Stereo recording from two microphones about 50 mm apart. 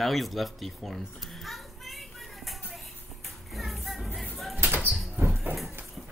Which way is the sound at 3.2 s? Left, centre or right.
Centre.